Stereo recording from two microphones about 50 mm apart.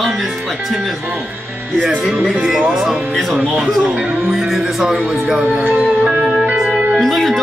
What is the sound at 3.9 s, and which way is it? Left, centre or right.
Speech, centre.